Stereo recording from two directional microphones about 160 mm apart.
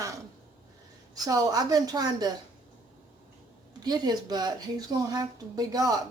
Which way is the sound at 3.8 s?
25° right (ahead or behind).